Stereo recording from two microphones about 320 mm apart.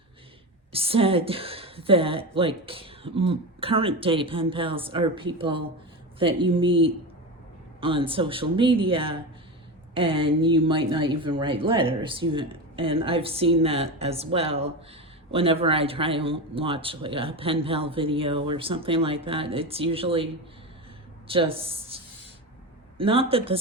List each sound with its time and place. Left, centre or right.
0.7 s speech: centre
21.2 s a woman's voice: centre